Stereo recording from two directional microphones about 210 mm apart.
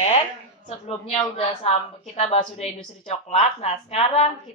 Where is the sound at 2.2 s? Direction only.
30° left (ahead or behind).